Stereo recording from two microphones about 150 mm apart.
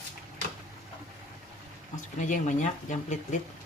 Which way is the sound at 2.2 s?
55° left (ahead or behind).